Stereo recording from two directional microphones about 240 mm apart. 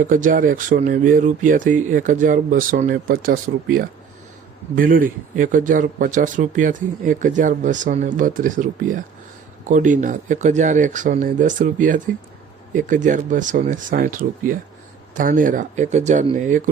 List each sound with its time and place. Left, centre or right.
0.0 s speech: right